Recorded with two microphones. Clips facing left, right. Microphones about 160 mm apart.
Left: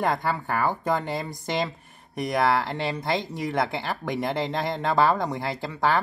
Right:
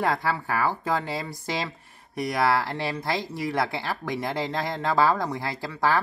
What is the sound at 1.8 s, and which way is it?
Speech, 20° left (ahead or behind).